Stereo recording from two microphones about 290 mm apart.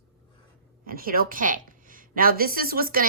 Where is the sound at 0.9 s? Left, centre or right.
Right.